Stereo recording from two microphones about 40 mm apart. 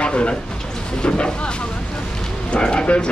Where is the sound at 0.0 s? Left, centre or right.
Left.